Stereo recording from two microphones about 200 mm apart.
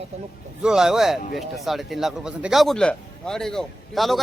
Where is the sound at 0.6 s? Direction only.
5° right (ahead or behind).